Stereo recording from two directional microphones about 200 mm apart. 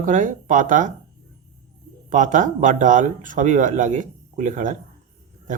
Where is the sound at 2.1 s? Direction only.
40° right (ahead or behind).